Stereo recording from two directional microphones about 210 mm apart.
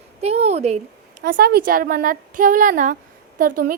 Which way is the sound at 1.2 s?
45° right (ahead or behind).